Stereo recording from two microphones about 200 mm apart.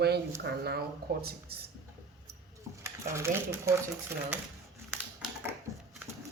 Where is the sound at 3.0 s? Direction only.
15° right (ahead or behind).